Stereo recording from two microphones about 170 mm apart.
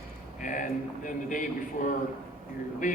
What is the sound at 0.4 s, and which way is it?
Speech, 50° left (ahead or behind).